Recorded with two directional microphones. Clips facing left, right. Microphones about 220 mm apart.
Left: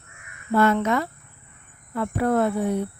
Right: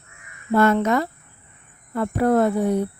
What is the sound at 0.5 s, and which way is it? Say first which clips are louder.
Speech: right 2 dB; 45° right (ahead or behind).